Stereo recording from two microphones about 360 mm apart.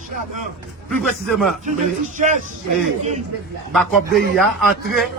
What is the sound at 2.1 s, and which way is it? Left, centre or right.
Speech, centre.